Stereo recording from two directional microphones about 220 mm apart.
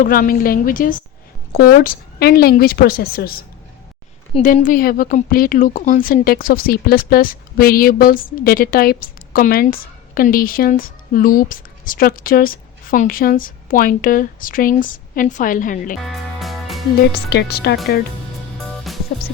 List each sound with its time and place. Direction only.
0.0 s a woman's voice: 40° left (ahead or behind)
4.4 s speech: 35° left (ahead or behind)
16.0 s music: centre (ahead or behind)
17.2 s a woman's voice: 45° left (ahead or behind)
18.5 s music: centre (ahead or behind)